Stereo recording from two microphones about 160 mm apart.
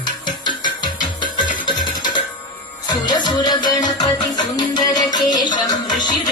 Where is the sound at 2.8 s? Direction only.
25° left (ahead or behind).